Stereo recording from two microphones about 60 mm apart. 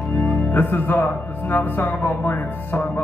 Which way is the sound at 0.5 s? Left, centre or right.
Left.